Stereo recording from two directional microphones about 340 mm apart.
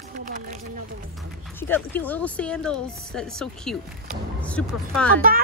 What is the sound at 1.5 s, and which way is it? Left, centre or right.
A woman's voice, centre.